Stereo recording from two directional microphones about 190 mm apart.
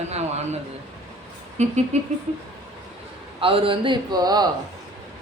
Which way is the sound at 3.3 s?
30° right (ahead or behind).